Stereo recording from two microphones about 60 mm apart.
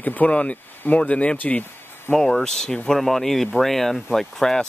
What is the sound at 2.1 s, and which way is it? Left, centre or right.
Speech, centre.